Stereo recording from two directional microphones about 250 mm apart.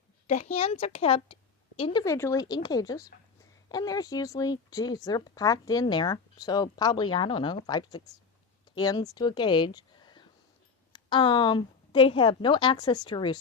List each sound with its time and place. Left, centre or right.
0.3 s a woman's voice: left